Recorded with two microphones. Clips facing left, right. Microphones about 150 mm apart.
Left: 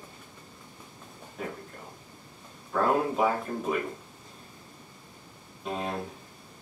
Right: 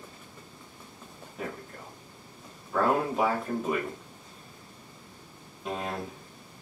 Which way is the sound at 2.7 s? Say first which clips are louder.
Even; centre (ahead or behind).